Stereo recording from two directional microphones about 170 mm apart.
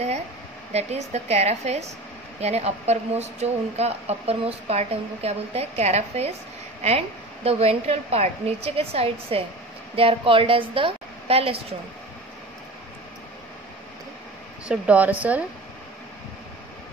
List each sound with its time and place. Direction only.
0.7 s speech: 40° right (ahead or behind)
7.4 s a woman's voice: 40° right (ahead or behind)
14.7 s speech: 10° right (ahead or behind)